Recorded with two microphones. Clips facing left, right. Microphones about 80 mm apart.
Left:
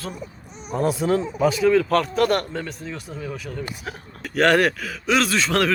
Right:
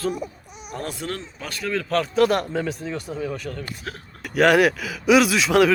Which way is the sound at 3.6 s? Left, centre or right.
Centre.